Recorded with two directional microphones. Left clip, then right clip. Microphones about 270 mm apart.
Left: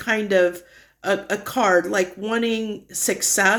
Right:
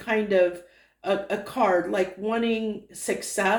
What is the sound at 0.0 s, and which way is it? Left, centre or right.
Speech, left.